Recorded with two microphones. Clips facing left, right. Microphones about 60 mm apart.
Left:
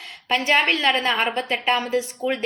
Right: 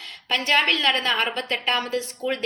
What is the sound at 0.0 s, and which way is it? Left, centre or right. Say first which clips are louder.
A woman's voice: left 3 dB; centre.